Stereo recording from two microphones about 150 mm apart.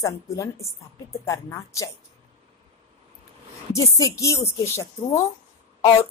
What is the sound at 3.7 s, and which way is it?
A woman's voice, 20° left (ahead or behind).